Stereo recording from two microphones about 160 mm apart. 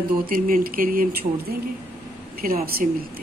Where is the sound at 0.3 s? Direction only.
60° right (ahead or behind).